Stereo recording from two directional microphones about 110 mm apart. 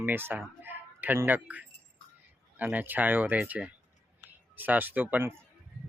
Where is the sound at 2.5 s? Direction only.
15° right (ahead or behind).